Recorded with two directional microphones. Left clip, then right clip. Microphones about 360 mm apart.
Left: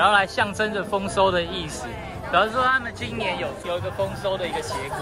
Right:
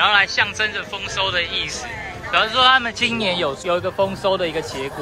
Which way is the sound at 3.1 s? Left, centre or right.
Centre.